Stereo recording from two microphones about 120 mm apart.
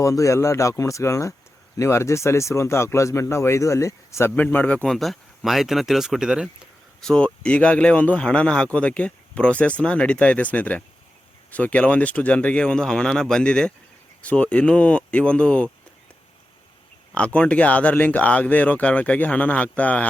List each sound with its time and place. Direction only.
0.0 s speech: 25° left (ahead or behind); by 6.5 s 5° right (ahead or behind)
7.0 s speech: 5° left (ahead or behind)
17.2 s speech: 10° left (ahead or behind)